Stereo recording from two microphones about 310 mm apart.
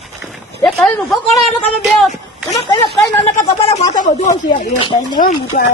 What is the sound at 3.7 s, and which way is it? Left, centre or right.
Speech, left.